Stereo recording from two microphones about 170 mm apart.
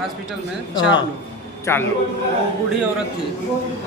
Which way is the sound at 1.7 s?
15° left (ahead or behind).